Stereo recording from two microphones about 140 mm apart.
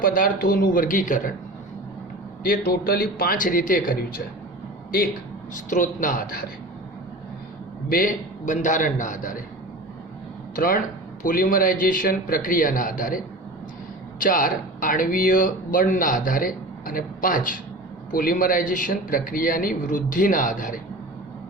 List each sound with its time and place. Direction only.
0.0 s speech: 85° left; by 1.3 s 70° left (ahead or behind)
2.4 s a man's voice: 90° left
5.7 s speech: 65° left (ahead or behind)
7.9 s speech: 85° left
10.5 s speech: 90° left
11.2 s speech: 75° left (ahead or behind)